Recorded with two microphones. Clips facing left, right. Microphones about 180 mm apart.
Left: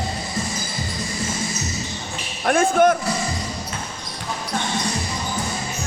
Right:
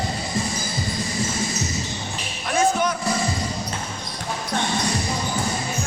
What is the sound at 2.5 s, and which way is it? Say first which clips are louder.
Speech: left 5 dB; 55° left (ahead or behind).